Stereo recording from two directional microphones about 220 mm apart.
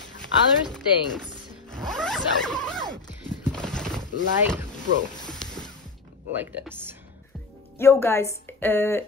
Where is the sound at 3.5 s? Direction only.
5° left (ahead or behind).